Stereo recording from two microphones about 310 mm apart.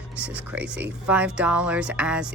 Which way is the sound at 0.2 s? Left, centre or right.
Centre.